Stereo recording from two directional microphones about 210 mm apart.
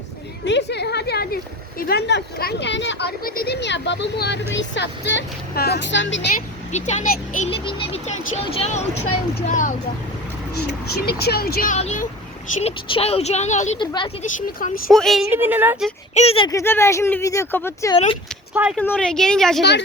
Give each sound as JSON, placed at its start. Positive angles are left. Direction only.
{"t": 0.4, "sound": "a sound", "side_deg": 55}
{"t": 1.8, "sound": "speech", "side_deg": 50}
{"t": 6.7, "sound": "a woman's voice", "side_deg": 35}
{"t": 7.5, "sound": "a woman's voice", "side_deg": 25}
{"t": 10.5, "sound": "a woman's voice", "side_deg": 50}
{"t": 13.7, "sound": "speech", "side_deg": 20}
{"t": 14.2, "sound": "a woman's voice", "side_deg": 40}
{"t": 14.8, "sound": "speech", "side_deg": 0}
{"t": 16.1, "sound": "speech", "side_deg": 30}
{"t": 16.5, "sound": "speech", "side_deg": 15}
{"t": 17.9, "sound": "speech", "side_deg": 25}
{"t": 18.8, "sound": "speech", "side_deg": 5}